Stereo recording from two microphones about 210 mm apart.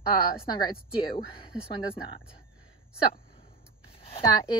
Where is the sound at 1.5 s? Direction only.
5° right (ahead or behind).